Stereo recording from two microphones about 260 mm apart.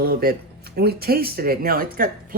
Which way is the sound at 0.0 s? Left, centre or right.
Right.